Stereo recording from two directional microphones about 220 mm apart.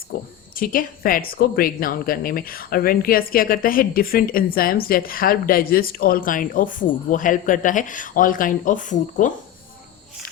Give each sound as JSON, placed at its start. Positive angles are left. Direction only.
{"t": 0.5, "sound": "a woman's voice", "side_deg": 40}